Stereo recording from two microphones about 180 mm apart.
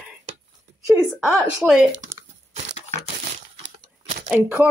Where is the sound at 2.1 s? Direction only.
15° right (ahead or behind).